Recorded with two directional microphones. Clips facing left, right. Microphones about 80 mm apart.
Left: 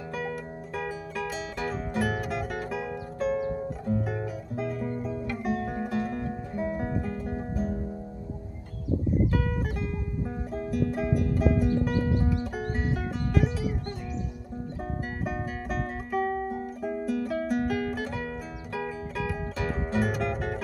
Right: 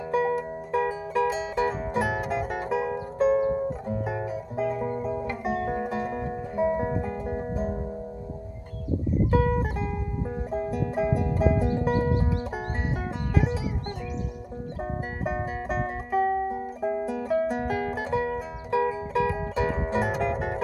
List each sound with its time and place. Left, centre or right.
0.1 s music: right
9.3 s music: right
14.8 s music: right